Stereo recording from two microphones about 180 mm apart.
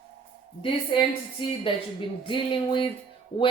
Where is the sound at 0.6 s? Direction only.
30° left (ahead or behind).